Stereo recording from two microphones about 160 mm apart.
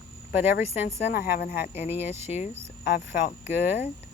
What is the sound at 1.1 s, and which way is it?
Speech, 65° left (ahead or behind).